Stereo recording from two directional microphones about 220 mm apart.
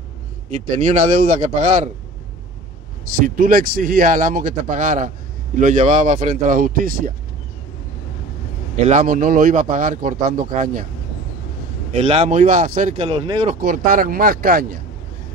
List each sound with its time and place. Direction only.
0.7 s speech: 35° right (ahead or behind)
3.3 s speech: 40° right (ahead or behind)
8.7 s speech: 30° right (ahead or behind)
12.0 s speech: 30° right (ahead or behind)
13.6 s speech: 40° right (ahead or behind)